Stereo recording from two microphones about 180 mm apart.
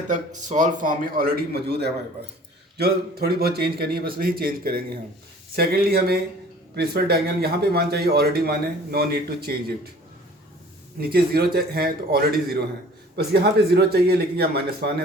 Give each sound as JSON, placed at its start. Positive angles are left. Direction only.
{"t": 0.1, "sound": "a man's voice", "side_deg": -45}
{"t": 11.0, "sound": "a man's voice", "side_deg": -60}